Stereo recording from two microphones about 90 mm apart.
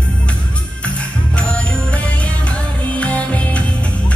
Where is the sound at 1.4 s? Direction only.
15° left (ahead or behind).